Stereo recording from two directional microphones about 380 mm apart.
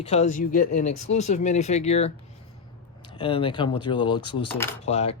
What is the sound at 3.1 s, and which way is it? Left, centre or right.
Speech, centre.